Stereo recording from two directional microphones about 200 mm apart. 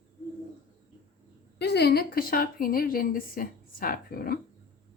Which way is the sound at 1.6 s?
55° left (ahead or behind).